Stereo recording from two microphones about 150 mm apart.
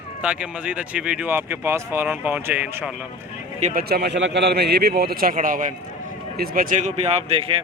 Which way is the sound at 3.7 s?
90° right.